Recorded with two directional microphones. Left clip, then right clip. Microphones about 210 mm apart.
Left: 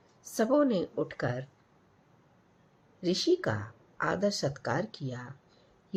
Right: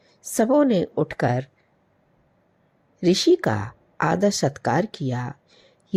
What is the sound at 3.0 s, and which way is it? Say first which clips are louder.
Speech: right 10 dB; 35° right (ahead or behind).